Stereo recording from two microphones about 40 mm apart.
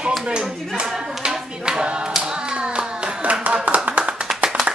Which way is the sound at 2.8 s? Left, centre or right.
Right.